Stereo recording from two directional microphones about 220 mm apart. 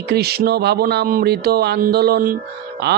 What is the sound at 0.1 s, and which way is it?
Speech, 45° right (ahead or behind).